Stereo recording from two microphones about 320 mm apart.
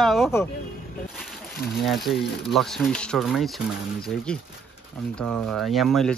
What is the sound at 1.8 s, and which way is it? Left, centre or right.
Speech, centre.